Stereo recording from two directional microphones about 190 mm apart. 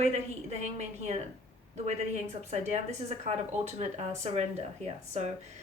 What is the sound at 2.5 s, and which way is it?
Speech, 35° right (ahead or behind).